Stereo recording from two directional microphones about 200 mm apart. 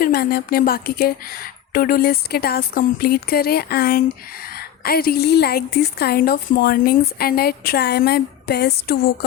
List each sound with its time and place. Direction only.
0.0 s a woman's voice: 50° left (ahead or behind)